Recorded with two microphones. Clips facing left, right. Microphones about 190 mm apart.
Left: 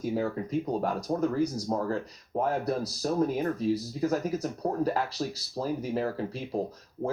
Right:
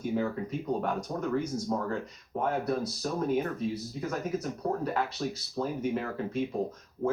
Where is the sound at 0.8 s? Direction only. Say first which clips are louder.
Left 4 dB; 35° left (ahead or behind).